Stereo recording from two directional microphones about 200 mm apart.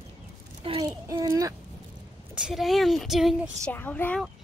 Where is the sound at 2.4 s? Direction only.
Centre (ahead or behind).